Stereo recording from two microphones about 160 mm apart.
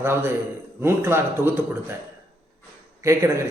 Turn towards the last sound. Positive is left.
turn(degrees=-20)  # may be behind; listen again after turning